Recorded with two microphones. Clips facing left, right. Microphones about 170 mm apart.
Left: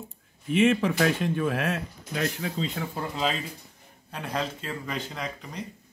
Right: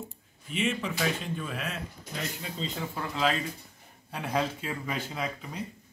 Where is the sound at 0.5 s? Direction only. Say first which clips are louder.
Left 9 dB; 65° left (ahead or behind).